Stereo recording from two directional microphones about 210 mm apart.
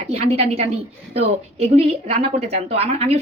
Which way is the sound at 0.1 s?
30° right (ahead or behind).